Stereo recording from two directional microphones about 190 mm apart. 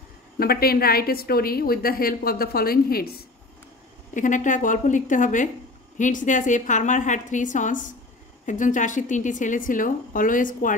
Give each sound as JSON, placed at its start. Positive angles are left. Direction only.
{"t": 0.4, "sound": "a woman's voice", "side_deg": 55}
{"t": 4.1, "sound": "a woman's voice", "side_deg": 40}